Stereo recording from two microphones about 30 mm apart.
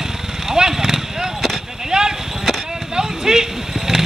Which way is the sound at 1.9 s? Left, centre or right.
Right.